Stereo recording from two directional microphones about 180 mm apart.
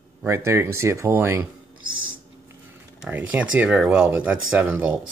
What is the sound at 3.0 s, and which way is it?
Speech, 10° right (ahead or behind).